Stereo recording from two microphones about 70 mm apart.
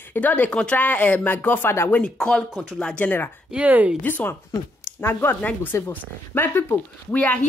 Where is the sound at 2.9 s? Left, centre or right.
Left.